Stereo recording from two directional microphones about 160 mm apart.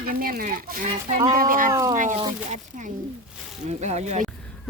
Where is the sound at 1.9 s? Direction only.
50° right (ahead or behind).